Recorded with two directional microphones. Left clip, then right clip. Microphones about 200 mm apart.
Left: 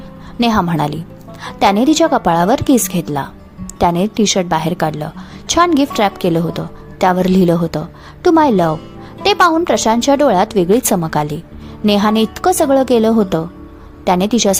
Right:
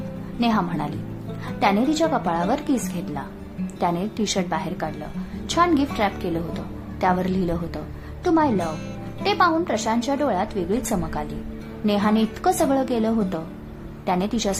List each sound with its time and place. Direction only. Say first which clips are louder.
0.3 s a woman's voice: left 9 dB; 45° left (ahead or behind)